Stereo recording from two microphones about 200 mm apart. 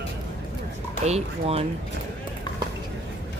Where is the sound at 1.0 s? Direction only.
30° right (ahead or behind).